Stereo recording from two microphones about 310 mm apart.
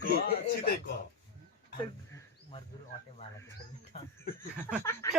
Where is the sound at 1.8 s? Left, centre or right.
Centre.